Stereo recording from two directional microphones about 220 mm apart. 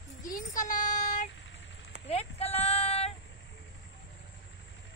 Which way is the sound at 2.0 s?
25° left (ahead or behind).